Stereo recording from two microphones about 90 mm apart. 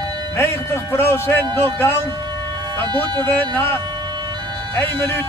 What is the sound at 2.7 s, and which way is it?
Speech, 55° right (ahead or behind).